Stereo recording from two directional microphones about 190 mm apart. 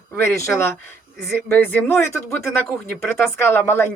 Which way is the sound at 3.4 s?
10° left (ahead or behind).